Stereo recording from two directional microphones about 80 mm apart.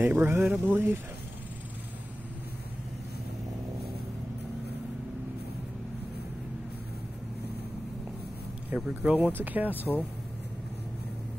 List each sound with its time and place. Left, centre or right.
0.0 s speech: right
8.6 s speech: centre
9.8 s speech: left